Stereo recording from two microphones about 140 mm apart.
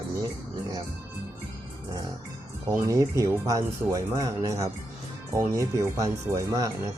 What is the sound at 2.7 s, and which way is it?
Speech, 20° right (ahead or behind).